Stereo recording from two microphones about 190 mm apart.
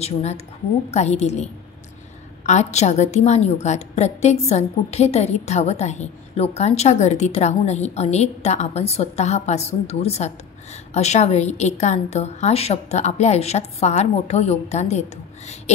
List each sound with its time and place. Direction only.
0.0 s a woman's voice: 35° left (ahead or behind)